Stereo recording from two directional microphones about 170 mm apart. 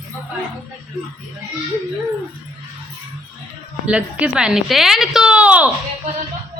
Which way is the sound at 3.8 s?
5° right (ahead or behind).